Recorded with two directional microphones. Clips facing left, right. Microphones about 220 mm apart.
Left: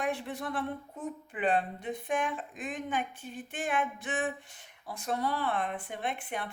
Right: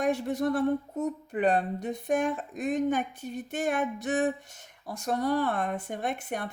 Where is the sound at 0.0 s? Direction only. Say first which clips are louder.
Right 7 dB; 40° right (ahead or behind).